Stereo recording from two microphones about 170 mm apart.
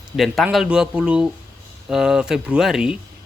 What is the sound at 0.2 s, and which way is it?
Speech, centre (ahead or behind).